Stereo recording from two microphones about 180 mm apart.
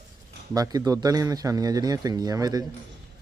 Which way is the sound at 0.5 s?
20° right (ahead or behind).